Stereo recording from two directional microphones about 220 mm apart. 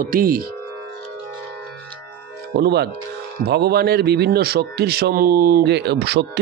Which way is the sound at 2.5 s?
50° right (ahead or behind).